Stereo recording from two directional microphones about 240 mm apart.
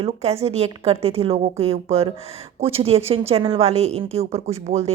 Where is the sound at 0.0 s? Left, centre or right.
Right.